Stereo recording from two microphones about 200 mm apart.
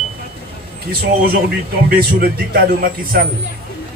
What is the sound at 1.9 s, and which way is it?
A man's voice, 45° right (ahead or behind).